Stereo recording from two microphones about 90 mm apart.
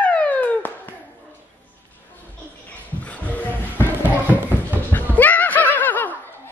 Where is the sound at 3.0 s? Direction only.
15° left (ahead or behind).